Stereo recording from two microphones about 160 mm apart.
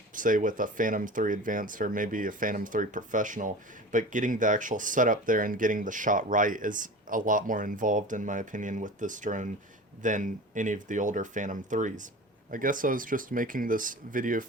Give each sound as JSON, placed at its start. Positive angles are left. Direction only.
{"t": 0.1, "sound": "speech", "side_deg": -55}